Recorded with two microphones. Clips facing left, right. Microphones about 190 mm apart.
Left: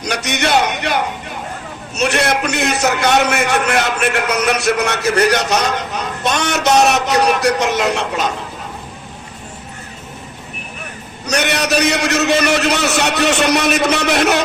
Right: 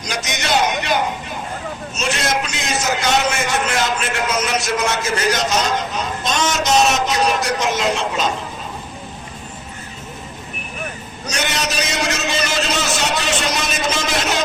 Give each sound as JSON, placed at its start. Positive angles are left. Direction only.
{"t": 0.0, "sound": "a sound", "side_deg": 65}
{"t": 2.0, "sound": "a man's voice", "side_deg": 65}
{"t": 11.3, "sound": "a man's voice", "side_deg": 65}